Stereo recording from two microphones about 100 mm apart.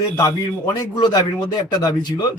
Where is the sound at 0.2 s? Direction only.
35° left (ahead or behind).